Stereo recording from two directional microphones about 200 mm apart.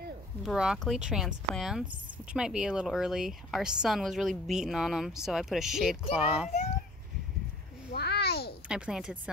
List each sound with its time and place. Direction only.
0.4 s a woman's voice: 5° right (ahead or behind)
7.9 s a sound: 55° left (ahead or behind)
8.6 s a woman's voice: 5° right (ahead or behind)